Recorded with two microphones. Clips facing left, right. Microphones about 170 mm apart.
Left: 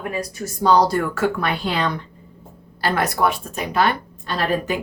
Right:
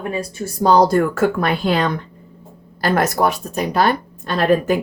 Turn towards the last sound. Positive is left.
turn(degrees=-45)  # may be behind; listen again after turning